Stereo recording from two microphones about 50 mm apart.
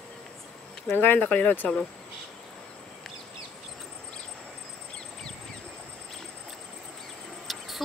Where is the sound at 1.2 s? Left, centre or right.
Left.